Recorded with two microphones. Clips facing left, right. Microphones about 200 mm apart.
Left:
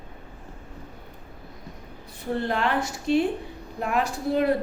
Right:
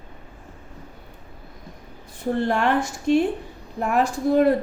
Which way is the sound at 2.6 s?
50° right (ahead or behind).